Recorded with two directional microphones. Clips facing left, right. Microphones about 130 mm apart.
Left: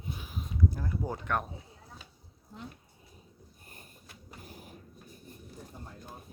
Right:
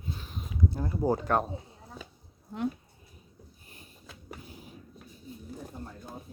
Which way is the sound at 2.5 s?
75° right (ahead or behind).